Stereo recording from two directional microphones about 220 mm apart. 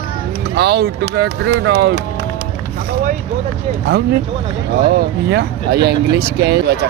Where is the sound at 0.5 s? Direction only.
45° right (ahead or behind).